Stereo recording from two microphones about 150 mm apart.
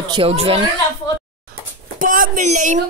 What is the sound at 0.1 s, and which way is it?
Speech, 40° right (ahead or behind).